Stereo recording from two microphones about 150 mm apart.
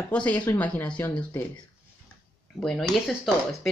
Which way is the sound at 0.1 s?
10° left (ahead or behind).